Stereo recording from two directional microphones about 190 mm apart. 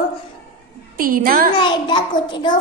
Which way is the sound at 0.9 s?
50° right (ahead or behind).